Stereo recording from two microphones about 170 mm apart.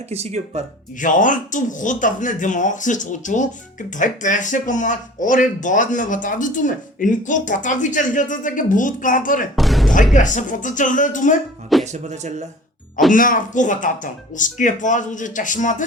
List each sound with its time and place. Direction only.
0.1 s speech: 40° right (ahead or behind)
0.9 s speech: 50° left (ahead or behind)
9.6 s music: centre (ahead or behind)
10.2 s speech: 45° left (ahead or behind)
11.9 s speech: 45° right (ahead or behind)
13.1 s speech: 55° left (ahead or behind)